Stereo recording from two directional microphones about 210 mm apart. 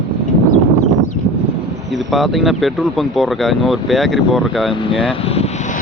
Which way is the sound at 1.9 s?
Centre (ahead or behind).